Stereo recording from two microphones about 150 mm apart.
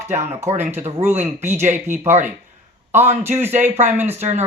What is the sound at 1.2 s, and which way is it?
Speech, 15° right (ahead or behind).